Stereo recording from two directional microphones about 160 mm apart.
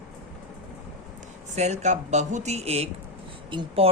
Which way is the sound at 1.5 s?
45° right (ahead or behind).